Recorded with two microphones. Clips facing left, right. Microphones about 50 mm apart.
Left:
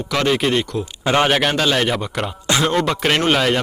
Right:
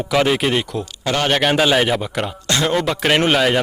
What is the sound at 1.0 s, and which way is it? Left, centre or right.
Speech, centre.